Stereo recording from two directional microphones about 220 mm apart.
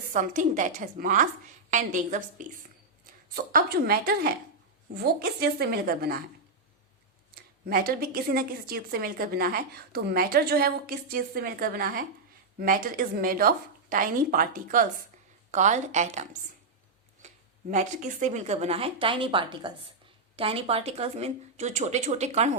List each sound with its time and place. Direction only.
0.1 s a woman's voice: 35° right (ahead or behind)
7.3 s a woman's voice: 40° right (ahead or behind)
17.2 s speech: 35° right (ahead or behind)